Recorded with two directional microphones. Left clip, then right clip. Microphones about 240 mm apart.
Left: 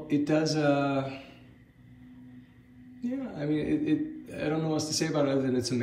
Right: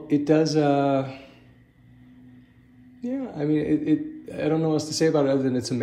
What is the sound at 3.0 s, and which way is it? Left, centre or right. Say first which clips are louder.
A man's voice: right 6 dB; centre.